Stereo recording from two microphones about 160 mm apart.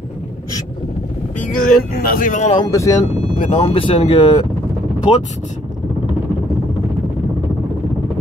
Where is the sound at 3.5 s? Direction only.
35° left (ahead or behind).